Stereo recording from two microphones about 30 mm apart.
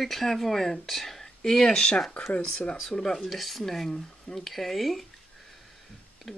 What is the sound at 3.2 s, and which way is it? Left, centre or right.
Speech, centre.